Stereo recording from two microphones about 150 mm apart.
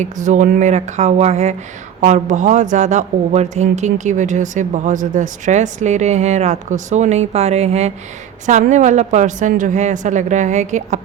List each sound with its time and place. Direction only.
0.0 s a woman's voice: 55° right (ahead or behind)